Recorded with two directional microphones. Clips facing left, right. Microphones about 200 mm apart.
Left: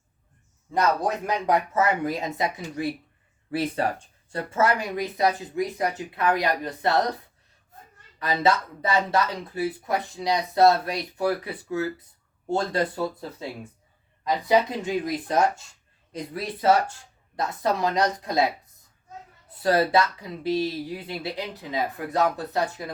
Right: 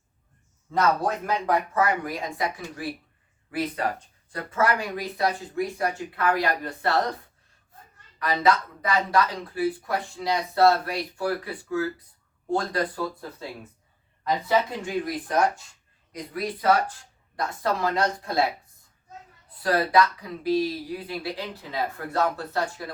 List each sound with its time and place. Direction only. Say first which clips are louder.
0.7 s speech: even; 15° left (ahead or behind)
8.2 s speech: even; 25° left (ahead or behind)
14.3 s speech: left 2 dB; 15° left (ahead or behind)
19.6 s speech: left 1 dB; 25° left (ahead or behind)